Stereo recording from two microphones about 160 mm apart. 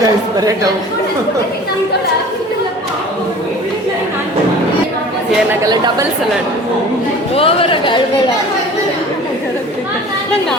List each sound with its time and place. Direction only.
0.0 s a woman's voice: 25° right (ahead or behind)
5.6 s a woman's voice: 25° right (ahead or behind)
7.3 s speech: 35° left (ahead or behind)